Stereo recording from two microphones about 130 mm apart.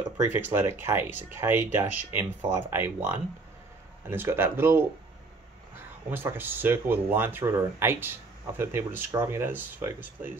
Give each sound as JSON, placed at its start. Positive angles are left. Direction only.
{"t": 0.2, "sound": "speech", "side_deg": -15}